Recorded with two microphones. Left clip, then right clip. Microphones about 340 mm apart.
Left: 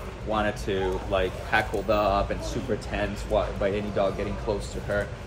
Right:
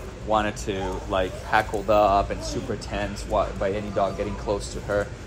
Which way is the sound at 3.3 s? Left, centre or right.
Centre.